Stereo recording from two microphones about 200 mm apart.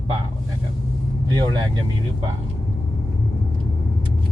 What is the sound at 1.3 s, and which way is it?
Speech, 20° right (ahead or behind).